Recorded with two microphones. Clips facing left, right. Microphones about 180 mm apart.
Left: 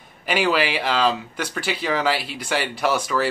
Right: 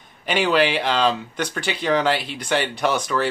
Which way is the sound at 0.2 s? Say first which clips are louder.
Right 2 dB; 5° left (ahead or behind).